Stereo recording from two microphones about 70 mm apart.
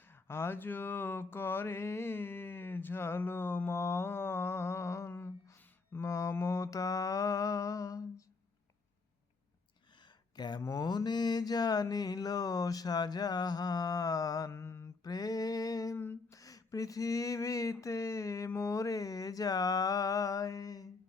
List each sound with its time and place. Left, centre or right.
0.3 s mantra: left
10.3 s speech: left
10.6 s mantra: left
14.5 s mantra: left
15.0 s a sound: left